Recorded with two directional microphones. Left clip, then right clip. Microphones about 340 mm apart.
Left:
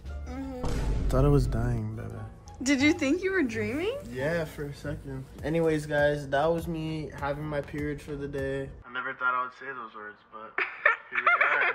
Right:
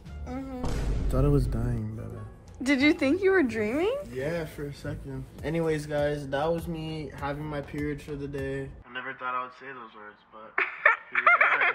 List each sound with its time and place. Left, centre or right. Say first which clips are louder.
0.3 s music: right 1 dB; centre
1.3 s speech: left 1 dB; centre
1.8 s music: even; centre
2.6 s speech: right 1 dB; centre
10.5 s snicker: right 2 dB; centre